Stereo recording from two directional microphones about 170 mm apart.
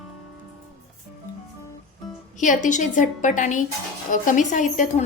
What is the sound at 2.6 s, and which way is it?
A woman's voice, 45° left (ahead or behind).